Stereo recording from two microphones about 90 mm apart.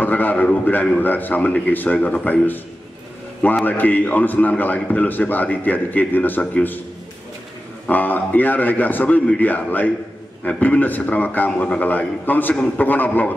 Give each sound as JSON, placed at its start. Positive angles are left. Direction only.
{"t": 0.0, "sound": "a man's voice", "side_deg": 20}
{"t": 3.6, "sound": "a man's voice", "side_deg": 20}
{"t": 7.8, "sound": "a man's voice", "side_deg": 20}